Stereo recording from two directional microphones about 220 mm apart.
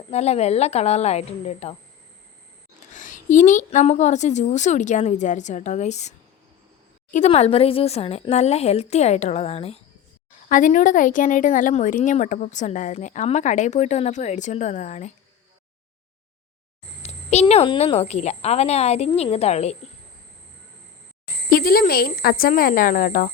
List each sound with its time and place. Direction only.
0.1 s a woman's voice: 30° left (ahead or behind)
2.9 s a woman's voice: 35° left (ahead or behind)
17.0 s a woman's voice: 30° left (ahead or behind)
21.5 s a woman's voice: 40° left (ahead or behind)